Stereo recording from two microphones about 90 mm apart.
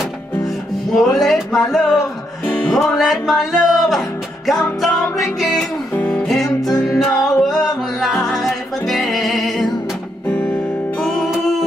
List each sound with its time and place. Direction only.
0.9 s speech: centre (ahead or behind)
2.4 s music: 5° left (ahead or behind)
5.4 s music: centre (ahead or behind)
5.9 s music: 20° left (ahead or behind)
6.2 s music: centre (ahead or behind)
10.2 s music: 15° left (ahead or behind)
11.0 s music: centre (ahead or behind)